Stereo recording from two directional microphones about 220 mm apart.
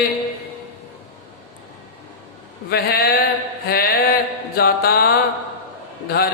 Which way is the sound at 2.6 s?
45° left (ahead or behind).